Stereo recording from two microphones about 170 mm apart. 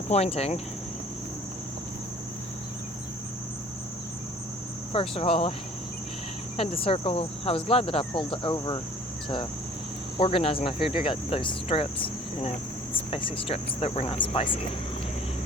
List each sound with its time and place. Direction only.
0.1 s speech: 35° left (ahead or behind)
4.9 s speech: 35° left (ahead or behind)
6.6 s speech: 35° left (ahead or behind)
10.2 s speech: 35° left (ahead or behind)